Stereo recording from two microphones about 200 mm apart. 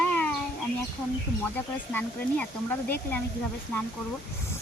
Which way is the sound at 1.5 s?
10° left (ahead or behind).